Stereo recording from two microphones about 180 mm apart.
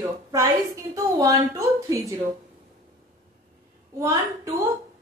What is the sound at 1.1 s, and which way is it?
Speech, 15° right (ahead or behind).